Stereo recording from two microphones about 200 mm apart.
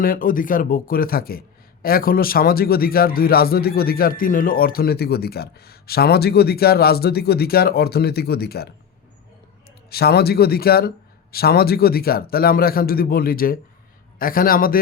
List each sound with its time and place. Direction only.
0.0 s a man's voice: 45° left (ahead or behind)
9.9 s a man's voice: 50° left (ahead or behind)